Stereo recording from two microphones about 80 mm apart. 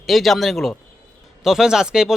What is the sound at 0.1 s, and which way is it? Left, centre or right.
Speech, centre.